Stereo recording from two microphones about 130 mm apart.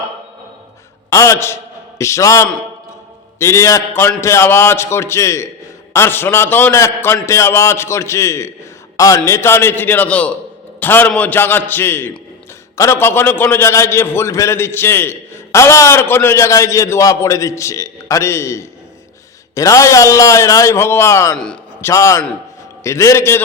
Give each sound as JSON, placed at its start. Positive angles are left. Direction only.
{"t": 1.1, "sound": "a man's voice", "side_deg": 25}
{"t": 21.3, "sound": "a man's voice", "side_deg": 5}
{"t": 21.8, "sound": "a man's voice", "side_deg": 20}